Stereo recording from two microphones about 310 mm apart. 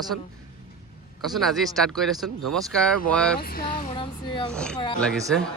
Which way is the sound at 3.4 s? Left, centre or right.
Left.